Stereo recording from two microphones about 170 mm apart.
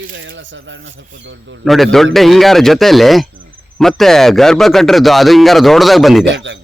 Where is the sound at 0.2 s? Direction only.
90° right.